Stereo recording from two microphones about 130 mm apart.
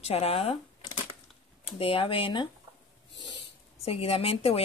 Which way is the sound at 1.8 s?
45° left (ahead or behind).